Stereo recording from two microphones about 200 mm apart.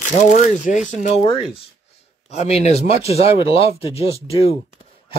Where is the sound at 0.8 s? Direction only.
35° left (ahead or behind).